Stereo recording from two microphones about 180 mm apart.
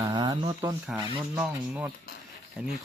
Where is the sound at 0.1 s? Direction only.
20° right (ahead or behind).